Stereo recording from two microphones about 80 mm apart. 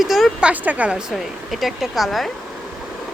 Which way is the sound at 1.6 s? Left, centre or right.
Centre.